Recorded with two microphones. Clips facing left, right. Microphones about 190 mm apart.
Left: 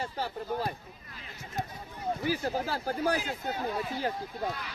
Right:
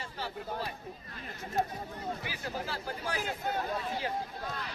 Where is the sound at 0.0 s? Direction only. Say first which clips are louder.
Left 5 dB; 45° left (ahead or behind).